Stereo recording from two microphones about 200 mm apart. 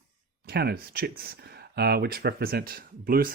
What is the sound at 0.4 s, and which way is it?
Speech, 50° right (ahead or behind).